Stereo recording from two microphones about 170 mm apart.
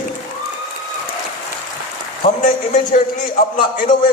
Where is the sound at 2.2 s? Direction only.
45° left (ahead or behind).